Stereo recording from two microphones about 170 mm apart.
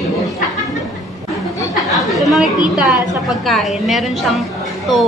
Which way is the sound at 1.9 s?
Centre (ahead or behind).